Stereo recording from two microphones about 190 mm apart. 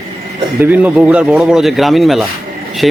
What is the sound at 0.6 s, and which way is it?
Speech, 10° right (ahead or behind).